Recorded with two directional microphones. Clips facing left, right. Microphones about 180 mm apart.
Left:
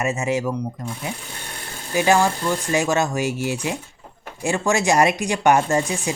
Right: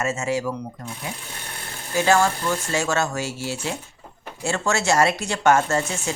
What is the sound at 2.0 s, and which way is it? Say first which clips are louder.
Speech: left 1 dB; 15° left (ahead or behind).